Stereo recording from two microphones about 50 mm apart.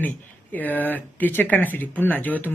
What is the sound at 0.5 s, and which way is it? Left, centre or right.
Speech, left.